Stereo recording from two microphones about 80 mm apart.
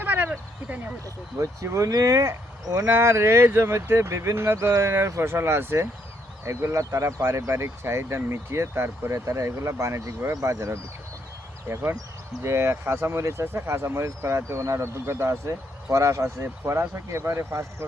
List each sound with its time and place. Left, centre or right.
0.0 s a sound: right
1.4 s speech: right
2.9 s speech: right
11.7 s speech: right